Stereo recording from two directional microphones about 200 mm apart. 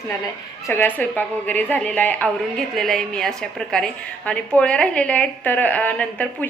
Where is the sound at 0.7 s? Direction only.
10° left (ahead or behind).